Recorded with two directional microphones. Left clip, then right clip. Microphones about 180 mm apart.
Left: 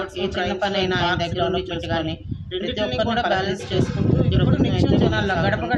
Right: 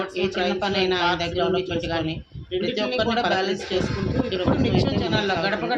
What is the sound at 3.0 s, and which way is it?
Speech, 30° left (ahead or behind).